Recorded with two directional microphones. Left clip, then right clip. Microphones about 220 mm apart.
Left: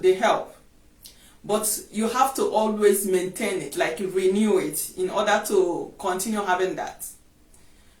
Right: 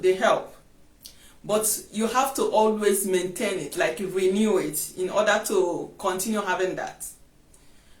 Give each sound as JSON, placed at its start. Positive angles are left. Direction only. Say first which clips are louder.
{"t": 0.0, "sound": "speech", "louder": "left 1 dB", "side_deg": -15}
{"t": 1.5, "sound": "speech", "louder": "even", "side_deg": -15}